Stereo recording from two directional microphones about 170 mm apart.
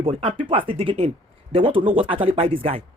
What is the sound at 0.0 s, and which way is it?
Speech, 35° right (ahead or behind).